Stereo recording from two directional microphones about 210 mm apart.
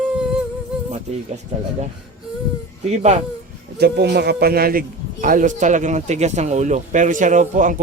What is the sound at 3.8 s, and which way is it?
A man's voice, 55° right (ahead or behind).